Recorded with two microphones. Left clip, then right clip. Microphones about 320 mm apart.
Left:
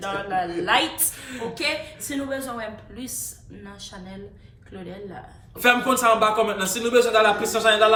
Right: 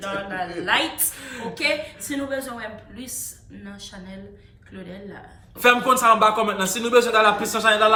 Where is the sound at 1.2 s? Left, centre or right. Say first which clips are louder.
Left 1 dB; centre.